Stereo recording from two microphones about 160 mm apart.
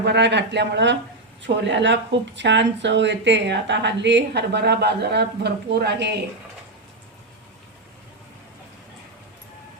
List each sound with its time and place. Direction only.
0.0 s speech: 90° right